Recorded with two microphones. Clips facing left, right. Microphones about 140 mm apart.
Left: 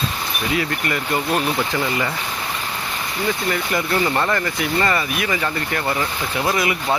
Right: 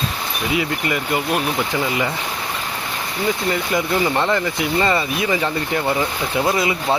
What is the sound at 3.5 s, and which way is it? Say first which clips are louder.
Speech: right 1 dB; 20° right (ahead or behind).